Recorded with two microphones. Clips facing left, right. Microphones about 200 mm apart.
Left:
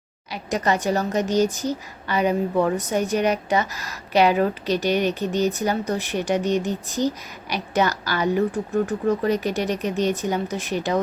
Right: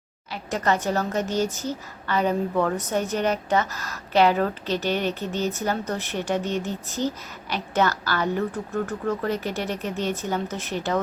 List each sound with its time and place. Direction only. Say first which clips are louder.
0.3 s a woman's voice: left 2 dB; 15° left (ahead or behind)